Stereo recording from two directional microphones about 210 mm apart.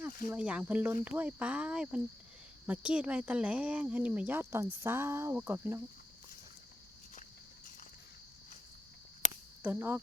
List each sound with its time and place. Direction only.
0.3 s speech: 5° right (ahead or behind)
9.2 s a sound: 35° left (ahead or behind)
9.6 s speech: 10° right (ahead or behind)